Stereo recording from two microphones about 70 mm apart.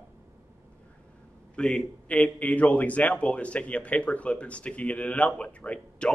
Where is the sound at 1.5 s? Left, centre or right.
Centre.